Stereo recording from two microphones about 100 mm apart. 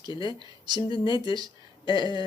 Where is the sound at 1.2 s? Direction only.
45° right (ahead or behind).